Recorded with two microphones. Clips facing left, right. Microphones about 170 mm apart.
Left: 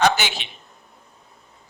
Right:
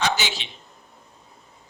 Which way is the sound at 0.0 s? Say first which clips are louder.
Left 5 dB; 55° left (ahead or behind).